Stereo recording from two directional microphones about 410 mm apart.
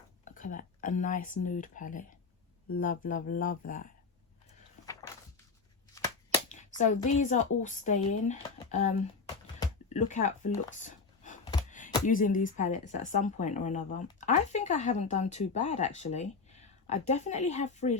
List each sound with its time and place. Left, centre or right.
0.3 s speech: centre
5.9 s speech: centre